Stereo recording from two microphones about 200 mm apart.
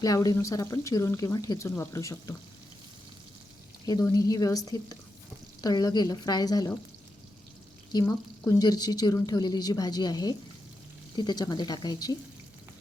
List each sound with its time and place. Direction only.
0.0 s speech: 20° left (ahead or behind)
3.8 s a woman's voice: 20° left (ahead or behind)
7.9 s a woman's voice: 15° left (ahead or behind)